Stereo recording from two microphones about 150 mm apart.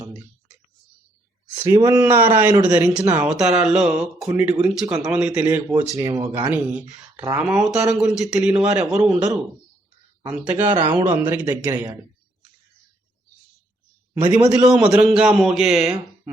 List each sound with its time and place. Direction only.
1.5 s speech: 20° right (ahead or behind)
7.2 s speech: 20° right (ahead or behind)
7.4 s speech: 5° right (ahead or behind)
10.2 s speech: 10° right (ahead or behind)
14.1 s a man's voice: 15° right (ahead or behind)
14.6 s speech: 5° right (ahead or behind)